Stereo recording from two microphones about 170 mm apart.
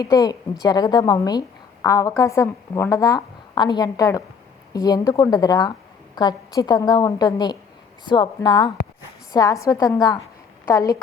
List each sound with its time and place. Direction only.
0.0 s a woman's voice: 20° left (ahead or behind)